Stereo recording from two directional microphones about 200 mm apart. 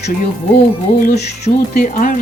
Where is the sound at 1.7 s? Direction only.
40° left (ahead or behind).